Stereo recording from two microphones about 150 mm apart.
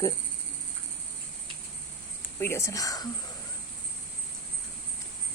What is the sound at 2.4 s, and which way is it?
Speech, 20° left (ahead or behind).